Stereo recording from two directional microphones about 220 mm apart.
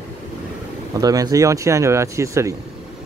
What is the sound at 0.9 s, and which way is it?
Speech, 15° right (ahead or behind).